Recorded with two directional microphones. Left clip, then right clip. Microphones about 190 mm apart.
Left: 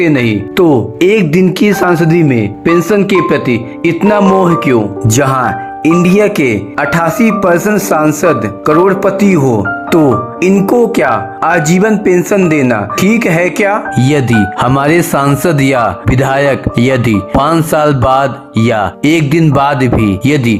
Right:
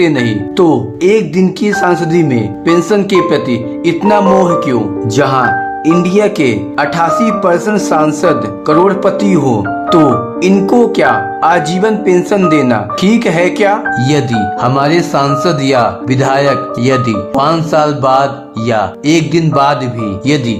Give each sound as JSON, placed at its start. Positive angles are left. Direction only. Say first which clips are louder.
{"t": 0.0, "sound": "speech", "louder": "left 1 dB", "side_deg": 25}